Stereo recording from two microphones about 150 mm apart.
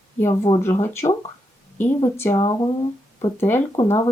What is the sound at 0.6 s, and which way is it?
Speech, 15° left (ahead or behind).